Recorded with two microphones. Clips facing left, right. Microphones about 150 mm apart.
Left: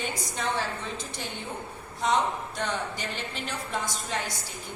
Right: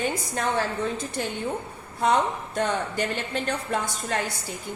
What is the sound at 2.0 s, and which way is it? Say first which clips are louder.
A woman's voice: right 3 dB; 55° right (ahead or behind).